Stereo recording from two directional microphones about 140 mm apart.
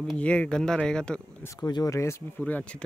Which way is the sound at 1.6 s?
30° left (ahead or behind).